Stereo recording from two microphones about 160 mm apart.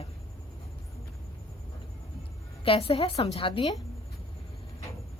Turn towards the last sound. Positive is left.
turn(degrees=30)  # may be behind; listen again after turning